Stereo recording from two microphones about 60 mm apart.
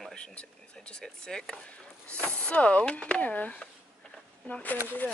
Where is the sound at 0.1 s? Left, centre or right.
Centre.